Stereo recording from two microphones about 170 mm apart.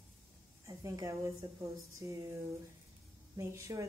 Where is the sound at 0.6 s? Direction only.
15° right (ahead or behind).